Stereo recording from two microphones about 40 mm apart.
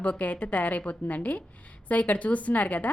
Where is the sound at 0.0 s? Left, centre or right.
Left.